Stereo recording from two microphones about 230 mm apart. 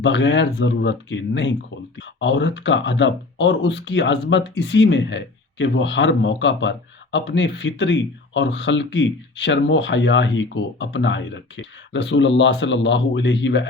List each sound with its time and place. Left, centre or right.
0.0 s speech: left